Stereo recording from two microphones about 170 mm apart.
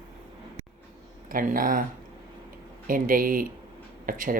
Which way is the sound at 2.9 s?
55° right (ahead or behind).